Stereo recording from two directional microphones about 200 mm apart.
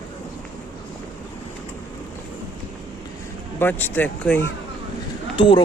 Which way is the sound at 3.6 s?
10° left (ahead or behind).